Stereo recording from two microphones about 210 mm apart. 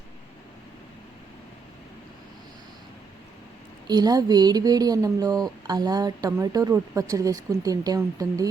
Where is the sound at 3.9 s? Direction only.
20° right (ahead or behind).